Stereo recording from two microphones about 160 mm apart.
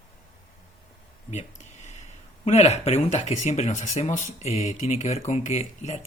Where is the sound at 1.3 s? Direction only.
45° left (ahead or behind).